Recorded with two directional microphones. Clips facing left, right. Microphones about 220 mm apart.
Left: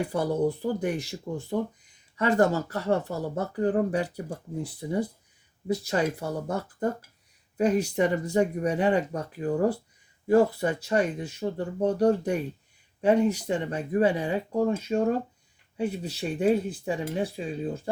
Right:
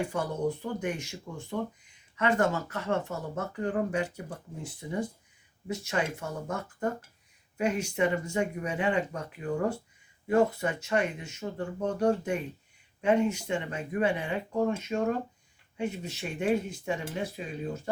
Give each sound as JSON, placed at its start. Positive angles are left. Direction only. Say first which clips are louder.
{"t": 0.1, "sound": "speech", "louder": "left 5 dB", "side_deg": 35}